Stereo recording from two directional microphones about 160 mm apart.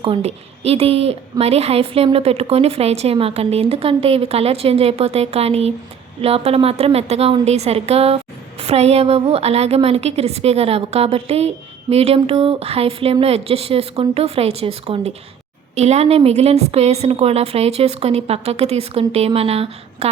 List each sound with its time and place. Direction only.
0.0 s a woman's voice: 40° right (ahead or behind)